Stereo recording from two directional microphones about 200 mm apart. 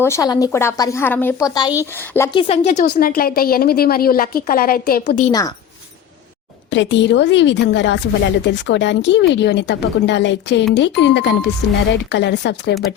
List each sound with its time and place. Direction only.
0.0 s a woman's voice: 15° left (ahead or behind)
2.3 s speech: 30° left (ahead or behind)
2.8 s a woman's voice: 50° left (ahead or behind)
5.3 s a woman's voice: 15° left (ahead or behind)
6.7 s a woman's voice: 65° left (ahead or behind)